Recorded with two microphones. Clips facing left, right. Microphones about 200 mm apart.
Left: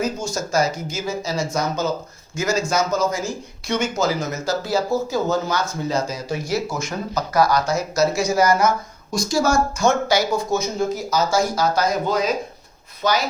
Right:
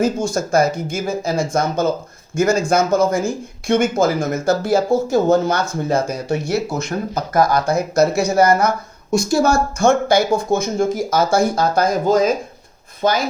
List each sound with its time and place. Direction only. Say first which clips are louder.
0.0 s speech: right 6 dB; 55° right (ahead or behind)